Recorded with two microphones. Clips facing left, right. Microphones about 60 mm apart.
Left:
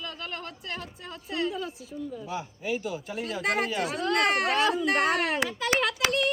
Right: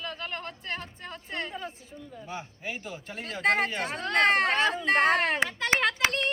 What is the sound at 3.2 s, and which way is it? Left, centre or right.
Speech, right.